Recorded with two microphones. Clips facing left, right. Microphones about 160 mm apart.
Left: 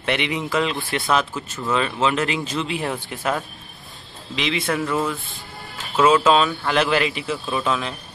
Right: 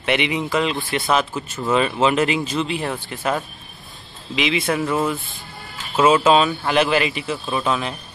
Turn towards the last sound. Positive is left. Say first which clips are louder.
# right 1 dB
turn(degrees=-5)  # may be behind; listen again after turning